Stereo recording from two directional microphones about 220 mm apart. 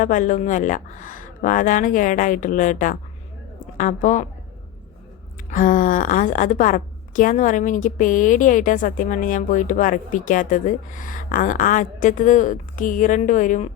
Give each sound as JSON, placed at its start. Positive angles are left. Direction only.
{"t": 0.0, "sound": "a woman's voice", "side_deg": 35}
{"t": 5.5, "sound": "a woman's voice", "side_deg": 35}